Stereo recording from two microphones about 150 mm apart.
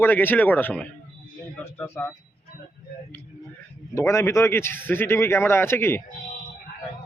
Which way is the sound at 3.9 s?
20° left (ahead or behind).